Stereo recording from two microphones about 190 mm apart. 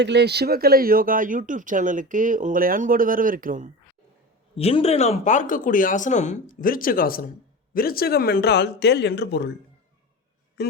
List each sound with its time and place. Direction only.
0.0 s speech: 65° right (ahead or behind); by 3.7 s 45° right (ahead or behind)
4.5 s speech: 30° left (ahead or behind); by 9.5 s 60° left (ahead or behind)
10.6 s a man's voice: 60° left (ahead or behind)